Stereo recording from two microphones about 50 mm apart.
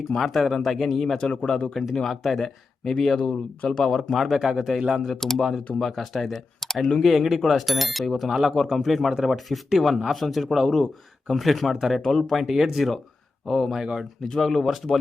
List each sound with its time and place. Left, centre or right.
0.2 s speech: centre
1.2 s speech: centre
1.7 s speech: centre
4.8 s speech: centre
5.0 s speech: centre
12.0 s speech: centre
12.4 s speech: centre
13.7 s speech: centre
14.2 s speech: centre